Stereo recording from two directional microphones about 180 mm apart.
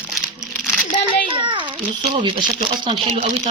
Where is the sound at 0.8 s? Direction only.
45° left (ahead or behind).